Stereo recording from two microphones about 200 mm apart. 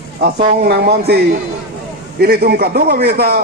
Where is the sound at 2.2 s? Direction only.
50° right (ahead or behind).